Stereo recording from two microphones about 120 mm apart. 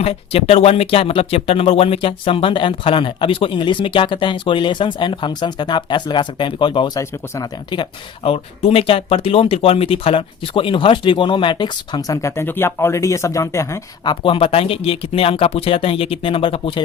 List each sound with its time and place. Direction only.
0.0 s speech: 55° left (ahead or behind); by 13.7 s 25° left (ahead or behind)
14.0 s speech: 45° left (ahead or behind)